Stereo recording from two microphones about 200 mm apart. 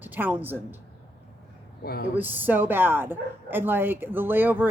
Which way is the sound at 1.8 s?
50° left (ahead or behind).